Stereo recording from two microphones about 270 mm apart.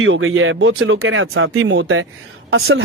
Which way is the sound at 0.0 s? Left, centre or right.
Right.